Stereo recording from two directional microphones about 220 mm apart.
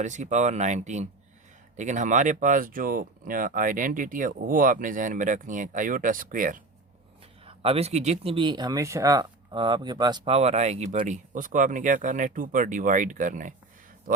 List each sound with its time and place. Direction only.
0.0 s speech: 35° right (ahead or behind)
7.4 s speech: 25° right (ahead or behind)